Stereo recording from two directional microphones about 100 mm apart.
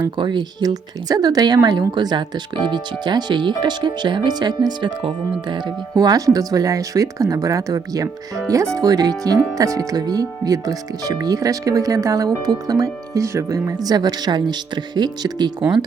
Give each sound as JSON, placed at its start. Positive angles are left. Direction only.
{"t": 0.0, "sound": "speech", "side_deg": -50}
{"t": 6.0, "sound": "speech", "side_deg": -40}